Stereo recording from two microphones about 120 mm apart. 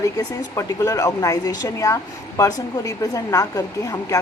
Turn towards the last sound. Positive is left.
turn(degrees=30)  # may be behind; listen again after turning